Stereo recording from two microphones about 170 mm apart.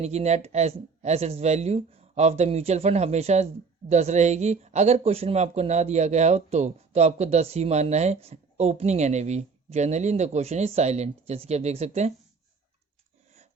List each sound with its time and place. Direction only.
0.0 s speech: 40° right (ahead or behind)